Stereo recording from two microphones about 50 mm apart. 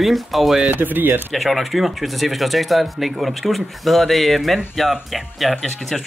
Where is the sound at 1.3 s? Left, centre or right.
Centre.